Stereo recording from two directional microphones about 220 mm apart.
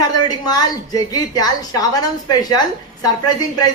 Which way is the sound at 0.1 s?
20° left (ahead or behind).